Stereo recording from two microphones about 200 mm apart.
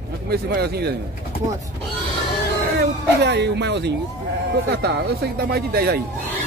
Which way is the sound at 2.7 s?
60° right (ahead or behind).